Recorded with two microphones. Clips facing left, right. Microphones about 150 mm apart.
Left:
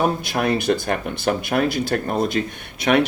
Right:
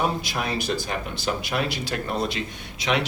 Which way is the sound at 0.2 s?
55° left (ahead or behind).